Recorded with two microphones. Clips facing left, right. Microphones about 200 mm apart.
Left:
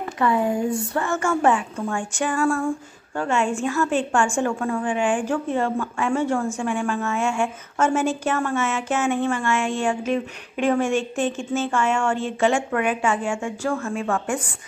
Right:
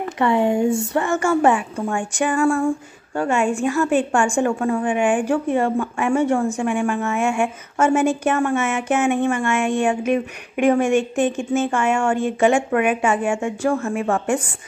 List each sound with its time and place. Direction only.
0.2 s a woman's voice: 25° right (ahead or behind)